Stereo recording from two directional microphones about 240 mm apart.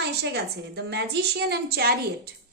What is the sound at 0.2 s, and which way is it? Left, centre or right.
A woman's voice, right.